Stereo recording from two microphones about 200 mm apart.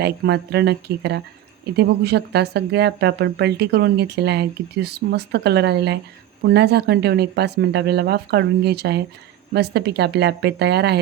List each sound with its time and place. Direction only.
0.0 s a woman's voice: 55° right (ahead or behind)